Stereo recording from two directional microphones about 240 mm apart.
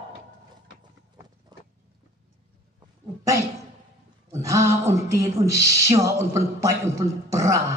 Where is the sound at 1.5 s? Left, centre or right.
Centre.